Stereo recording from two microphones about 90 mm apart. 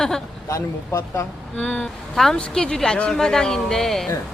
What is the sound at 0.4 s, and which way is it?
Speech, 40° left (ahead or behind).